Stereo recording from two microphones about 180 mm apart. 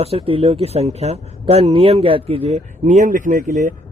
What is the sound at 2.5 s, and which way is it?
Speech, 40° right (ahead or behind).